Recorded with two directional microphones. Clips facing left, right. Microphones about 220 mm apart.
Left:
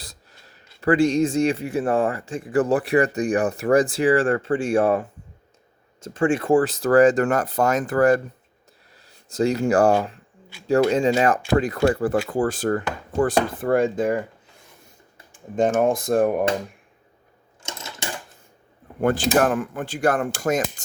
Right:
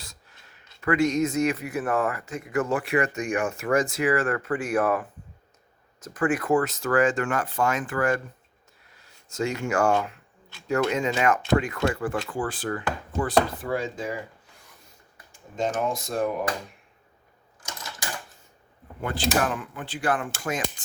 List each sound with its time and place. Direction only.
0.0 s speech: 35° left (ahead or behind); by 14.2 s 55° left (ahead or behind)
15.5 s speech: 50° left (ahead or behind)
17.6 s a sound: 25° left (ahead or behind)
18.9 s speech: 50° left (ahead or behind)